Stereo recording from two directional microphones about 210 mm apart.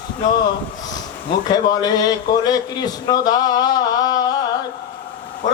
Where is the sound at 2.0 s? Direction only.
20° left (ahead or behind).